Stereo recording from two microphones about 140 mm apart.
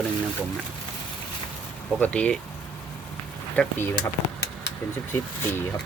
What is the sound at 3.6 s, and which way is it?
Speech, 5° left (ahead or behind).